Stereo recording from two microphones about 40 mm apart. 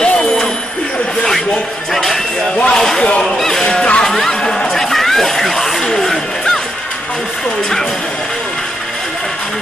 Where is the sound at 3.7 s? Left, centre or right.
Left.